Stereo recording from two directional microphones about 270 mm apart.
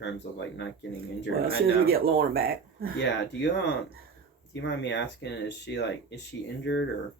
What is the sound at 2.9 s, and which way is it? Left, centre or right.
Speech, left.